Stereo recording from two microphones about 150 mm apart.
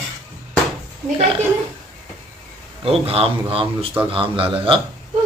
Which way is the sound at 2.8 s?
40° right (ahead or behind).